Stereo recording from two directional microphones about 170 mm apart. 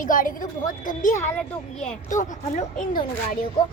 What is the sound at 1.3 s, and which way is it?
Speech, 5° left (ahead or behind).